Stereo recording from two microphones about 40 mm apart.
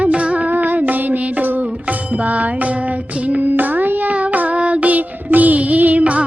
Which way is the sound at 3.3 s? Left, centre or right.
Right.